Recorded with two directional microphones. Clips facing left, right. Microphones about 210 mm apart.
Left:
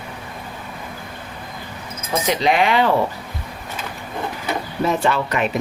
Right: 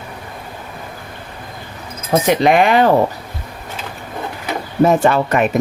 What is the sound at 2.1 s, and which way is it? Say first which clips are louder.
Speech: right 6 dB; 55° right (ahead or behind).